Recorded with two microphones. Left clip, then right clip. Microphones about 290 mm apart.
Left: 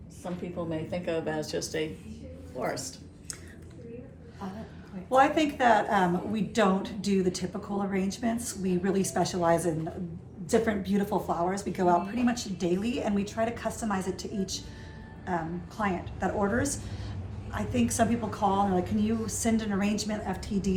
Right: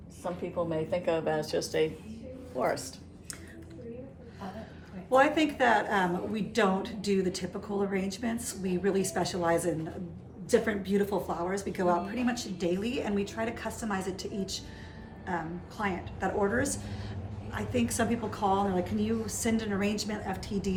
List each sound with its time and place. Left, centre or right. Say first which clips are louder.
0.5 s speech: right 4 dB; centre
5.1 s a woman's voice: left 1 dB; centre